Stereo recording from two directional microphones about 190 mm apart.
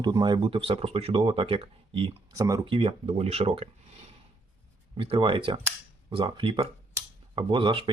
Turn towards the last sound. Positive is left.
turn(degrees=-25)  # may be behind; listen again after turning